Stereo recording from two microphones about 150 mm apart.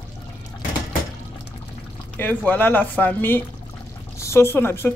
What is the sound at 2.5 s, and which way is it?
Speech, 10° left (ahead or behind).